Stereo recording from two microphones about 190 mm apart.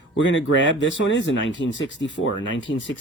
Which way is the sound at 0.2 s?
75° left (ahead or behind).